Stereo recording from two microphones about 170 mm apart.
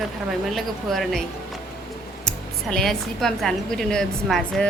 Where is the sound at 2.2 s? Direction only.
5° left (ahead or behind).